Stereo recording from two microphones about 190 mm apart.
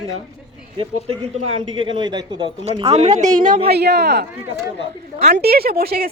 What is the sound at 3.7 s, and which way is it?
Speech, 60° right (ahead or behind).